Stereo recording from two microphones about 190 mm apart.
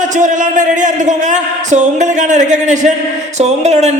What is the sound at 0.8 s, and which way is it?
A man's voice, 40° right (ahead or behind).